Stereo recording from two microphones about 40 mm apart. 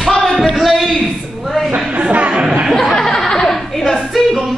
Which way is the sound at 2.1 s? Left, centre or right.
Right.